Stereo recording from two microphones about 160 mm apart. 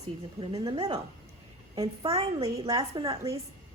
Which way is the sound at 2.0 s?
35° right (ahead or behind).